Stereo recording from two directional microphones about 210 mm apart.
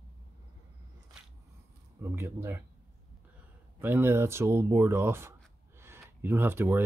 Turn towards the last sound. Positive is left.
turn(degrees=-10)  # may be behind; listen again after turning